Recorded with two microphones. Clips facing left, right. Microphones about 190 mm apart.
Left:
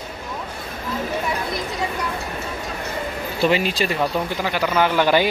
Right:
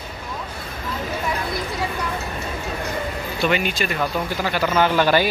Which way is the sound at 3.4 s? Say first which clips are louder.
Left 2 dB; 30° left (ahead or behind).